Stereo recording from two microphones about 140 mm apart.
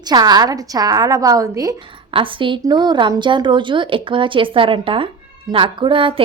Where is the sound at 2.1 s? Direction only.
40° right (ahead or behind).